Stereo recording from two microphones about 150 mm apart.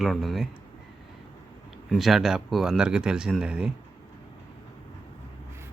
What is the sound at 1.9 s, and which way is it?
Speech, centre (ahead or behind).